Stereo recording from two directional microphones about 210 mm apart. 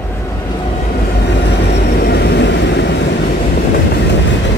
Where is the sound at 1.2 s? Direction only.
55° left (ahead or behind).